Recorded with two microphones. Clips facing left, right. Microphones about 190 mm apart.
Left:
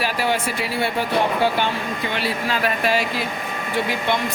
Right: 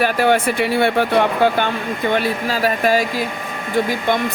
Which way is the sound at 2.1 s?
45° right (ahead or behind).